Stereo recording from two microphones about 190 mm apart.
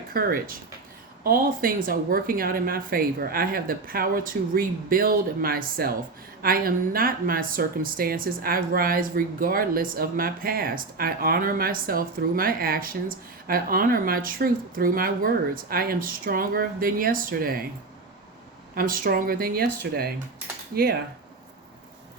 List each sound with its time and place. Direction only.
0.1 s speech: 50° right (ahead or behind)
18.7 s speech: 50° right (ahead or behind)